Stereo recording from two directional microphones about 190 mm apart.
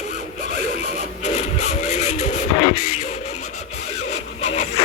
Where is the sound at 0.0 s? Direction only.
40° left (ahead or behind).